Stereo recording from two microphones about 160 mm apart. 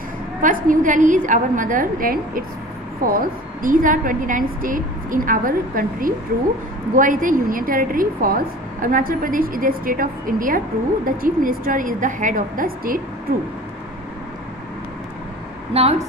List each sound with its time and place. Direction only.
0.4 s a woman's voice: 55° right (ahead or behind)
15.7 s a woman's voice: 40° right (ahead or behind)